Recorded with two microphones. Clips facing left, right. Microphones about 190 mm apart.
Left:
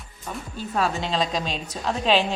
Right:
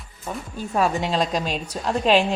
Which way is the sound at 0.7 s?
15° right (ahead or behind).